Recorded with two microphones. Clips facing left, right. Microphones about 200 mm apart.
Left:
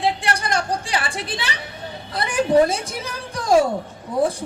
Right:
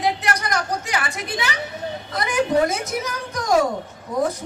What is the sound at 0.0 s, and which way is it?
A woman's voice, 30° left (ahead or behind).